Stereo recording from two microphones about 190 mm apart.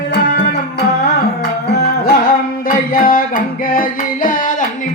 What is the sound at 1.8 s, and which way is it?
Music, 50° left (ahead or behind).